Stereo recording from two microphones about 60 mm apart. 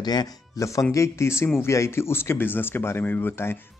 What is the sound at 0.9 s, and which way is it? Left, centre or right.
Speech, left.